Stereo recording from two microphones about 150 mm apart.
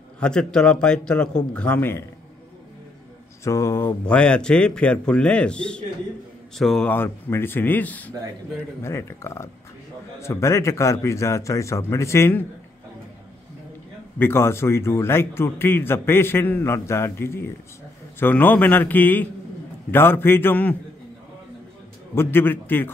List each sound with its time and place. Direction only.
0.2 s a man's voice: 5° left (ahead or behind)
3.4 s speech: 20° left (ahead or behind)
4.0 s a man's voice: 5° left (ahead or behind)
6.9 s a man's voice: 15° left (ahead or behind)
14.1 s a man's voice: 15° left (ahead or behind)
22.1 s a man's voice: 15° left (ahead or behind)